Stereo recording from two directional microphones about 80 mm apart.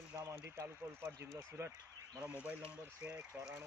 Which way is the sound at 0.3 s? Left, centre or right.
Right.